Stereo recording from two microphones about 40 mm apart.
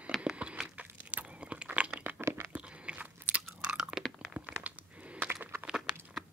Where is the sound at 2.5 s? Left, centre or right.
Right.